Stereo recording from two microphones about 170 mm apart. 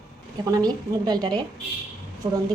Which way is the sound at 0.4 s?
25° right (ahead or behind).